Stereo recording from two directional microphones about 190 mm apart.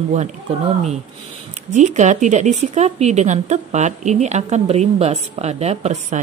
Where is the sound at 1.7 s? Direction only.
40° right (ahead or behind).